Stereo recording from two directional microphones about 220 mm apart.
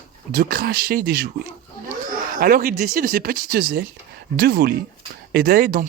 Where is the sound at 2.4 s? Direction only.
40° right (ahead or behind).